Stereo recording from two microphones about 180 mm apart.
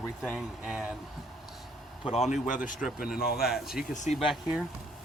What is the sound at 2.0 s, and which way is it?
Speech, 35° left (ahead or behind).